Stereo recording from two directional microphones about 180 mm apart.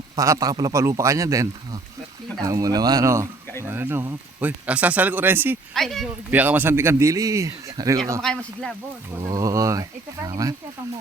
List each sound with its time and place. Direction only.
0.2 s speech: 20° right (ahead or behind)
5.7 s speech: centre (ahead or behind)
6.3 s speech: 10° right (ahead or behind)
8.2 s speech: 5° left (ahead or behind)
9.1 s speech: 20° right (ahead or behind)